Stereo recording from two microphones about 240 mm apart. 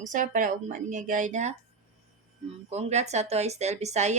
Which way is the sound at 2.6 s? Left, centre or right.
Right.